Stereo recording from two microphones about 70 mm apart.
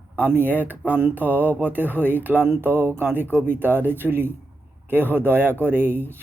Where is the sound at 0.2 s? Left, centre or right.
Right.